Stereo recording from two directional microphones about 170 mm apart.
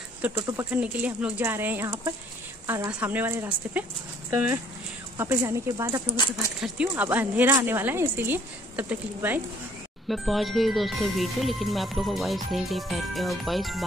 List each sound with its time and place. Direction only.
0.2 s speech: 15° right (ahead or behind)
6.6 s speech: 5° right (ahead or behind)
10.0 s speech: centre (ahead or behind)